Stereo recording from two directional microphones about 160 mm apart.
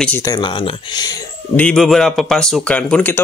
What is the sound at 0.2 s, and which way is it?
Speech, 25° left (ahead or behind).